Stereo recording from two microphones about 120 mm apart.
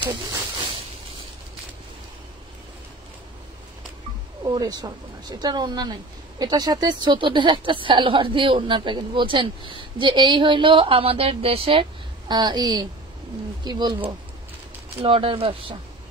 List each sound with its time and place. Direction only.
0.0 s a sound: 40° right (ahead or behind)
4.6 s speech: 35° right (ahead or behind)
15.0 s speech: 50° right (ahead or behind)